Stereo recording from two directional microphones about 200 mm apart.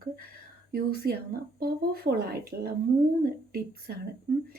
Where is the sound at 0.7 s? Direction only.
50° right (ahead or behind).